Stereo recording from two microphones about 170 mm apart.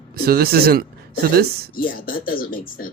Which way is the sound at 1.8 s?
55° left (ahead or behind).